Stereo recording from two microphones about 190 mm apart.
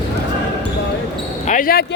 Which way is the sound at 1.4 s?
45° left (ahead or behind).